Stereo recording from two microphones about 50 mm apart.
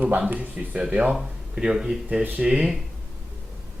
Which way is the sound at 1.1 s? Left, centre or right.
Centre.